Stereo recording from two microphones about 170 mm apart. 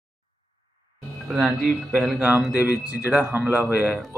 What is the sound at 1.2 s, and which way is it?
Speech, centre (ahead or behind).